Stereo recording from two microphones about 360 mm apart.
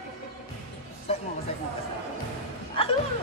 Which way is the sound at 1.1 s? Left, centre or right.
Centre.